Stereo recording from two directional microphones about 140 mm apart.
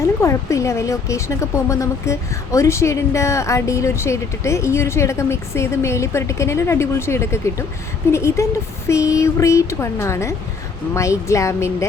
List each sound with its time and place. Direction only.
0.2 s speech: 20° left (ahead or behind)